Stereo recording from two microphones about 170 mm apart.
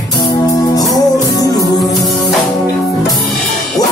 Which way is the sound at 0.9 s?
20° left (ahead or behind).